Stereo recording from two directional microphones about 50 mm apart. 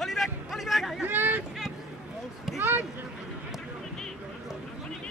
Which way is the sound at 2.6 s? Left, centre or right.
Right.